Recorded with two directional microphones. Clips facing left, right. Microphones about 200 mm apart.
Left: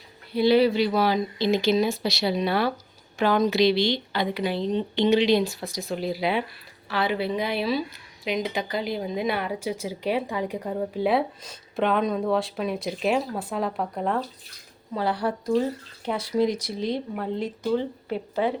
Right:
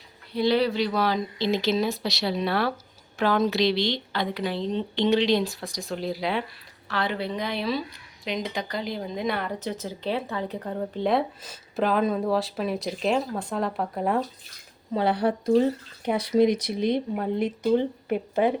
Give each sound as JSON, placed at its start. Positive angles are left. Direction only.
{"t": 0.3, "sound": "a woman's voice", "side_deg": 5}
{"t": 14.9, "sound": "speech", "side_deg": -20}